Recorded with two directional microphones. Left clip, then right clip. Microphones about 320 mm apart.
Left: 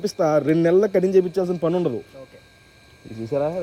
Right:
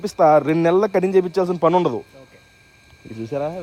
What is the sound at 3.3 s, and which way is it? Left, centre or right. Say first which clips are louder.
Speech: left 2 dB; right.